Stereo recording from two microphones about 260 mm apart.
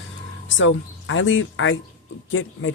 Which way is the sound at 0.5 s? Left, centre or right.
Left.